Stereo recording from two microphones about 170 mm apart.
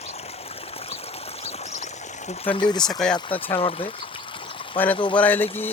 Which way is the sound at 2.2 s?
30° left (ahead or behind).